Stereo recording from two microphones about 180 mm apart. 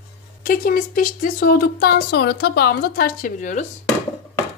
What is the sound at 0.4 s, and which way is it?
A woman's voice, 50° left (ahead or behind).